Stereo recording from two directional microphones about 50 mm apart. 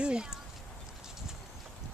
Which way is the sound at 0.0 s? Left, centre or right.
Centre.